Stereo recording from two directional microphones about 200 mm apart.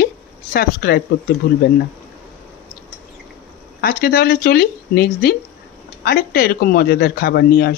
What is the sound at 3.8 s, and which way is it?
Speech, 50° left (ahead or behind).